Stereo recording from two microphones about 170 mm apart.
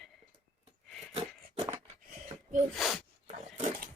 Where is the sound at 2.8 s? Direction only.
Centre (ahead or behind).